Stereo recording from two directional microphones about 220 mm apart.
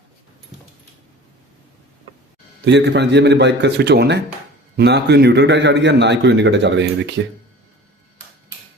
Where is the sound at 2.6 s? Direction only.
50° right (ahead or behind).